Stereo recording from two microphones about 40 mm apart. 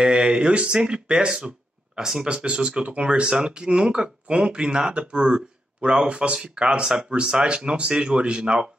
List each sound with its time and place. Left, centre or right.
0.0 s speech: centre